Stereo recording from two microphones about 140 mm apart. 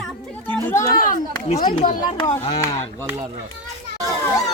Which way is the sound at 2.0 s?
35° left (ahead or behind).